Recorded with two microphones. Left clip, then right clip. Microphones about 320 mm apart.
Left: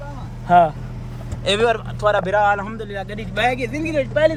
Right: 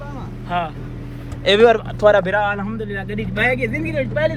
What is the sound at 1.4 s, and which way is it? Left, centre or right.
Speech, centre.